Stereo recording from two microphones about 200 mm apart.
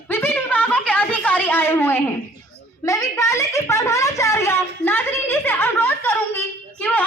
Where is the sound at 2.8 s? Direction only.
15° left (ahead or behind).